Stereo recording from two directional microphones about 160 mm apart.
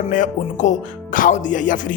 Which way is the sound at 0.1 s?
50° left (ahead or behind).